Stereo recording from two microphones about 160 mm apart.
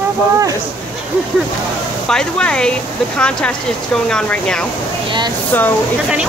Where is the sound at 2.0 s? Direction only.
5° left (ahead or behind).